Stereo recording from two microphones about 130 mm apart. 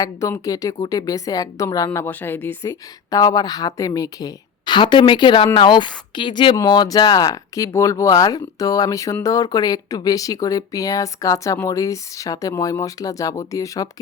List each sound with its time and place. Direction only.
0.0 s speech: 25° left (ahead or behind)
2.6 s speech: 30° left (ahead or behind)